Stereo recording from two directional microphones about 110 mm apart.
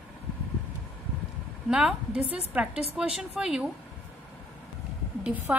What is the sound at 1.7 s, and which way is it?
A woman's voice, 5° right (ahead or behind).